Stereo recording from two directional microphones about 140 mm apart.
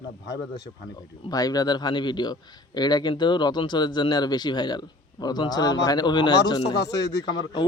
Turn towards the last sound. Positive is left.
turn(degrees=30)  # may be behind; listen again after turning